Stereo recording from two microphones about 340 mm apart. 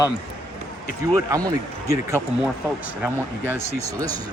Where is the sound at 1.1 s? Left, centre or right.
Centre.